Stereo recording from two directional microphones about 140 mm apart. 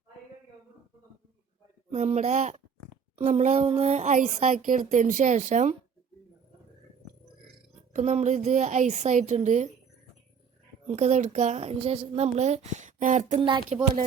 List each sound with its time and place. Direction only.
1.9 s a woman's voice: 50° right (ahead or behind)
3.2 s a sound: 55° right (ahead or behind)
3.7 s a woman's voice: 50° right (ahead or behind)
7.9 s a woman's voice: 60° right (ahead or behind)
10.8 s a woman's voice: 55° right (ahead or behind)
13.4 s speech: 35° right (ahead or behind)